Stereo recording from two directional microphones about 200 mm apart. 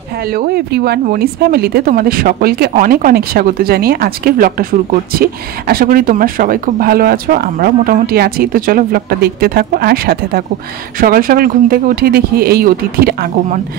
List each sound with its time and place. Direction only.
0.2 s speech: 50° right (ahead or behind)